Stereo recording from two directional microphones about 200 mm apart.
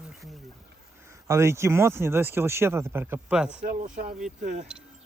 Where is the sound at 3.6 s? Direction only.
40° right (ahead or behind).